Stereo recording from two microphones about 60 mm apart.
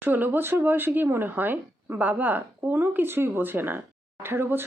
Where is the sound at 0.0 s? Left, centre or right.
Right.